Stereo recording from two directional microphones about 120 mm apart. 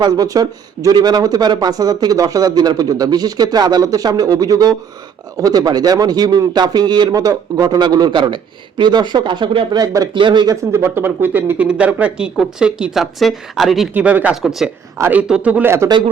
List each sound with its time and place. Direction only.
0.0 s speech: 35° right (ahead or behind)
9.8 s speech: 30° right (ahead or behind)
10.5 s speech: 25° right (ahead or behind); by 13.9 s centre (ahead or behind)
13.9 s speech: 15° right (ahead or behind)
15.2 s speech: 10° right (ahead or behind)